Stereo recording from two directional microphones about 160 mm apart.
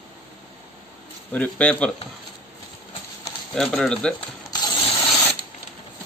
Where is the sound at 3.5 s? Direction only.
5° left (ahead or behind).